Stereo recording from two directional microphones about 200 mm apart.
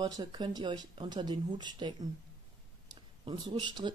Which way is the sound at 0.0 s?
20° right (ahead or behind).